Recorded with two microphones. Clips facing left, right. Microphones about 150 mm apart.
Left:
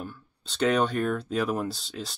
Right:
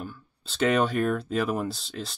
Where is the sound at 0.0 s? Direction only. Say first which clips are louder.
Even; centre (ahead or behind).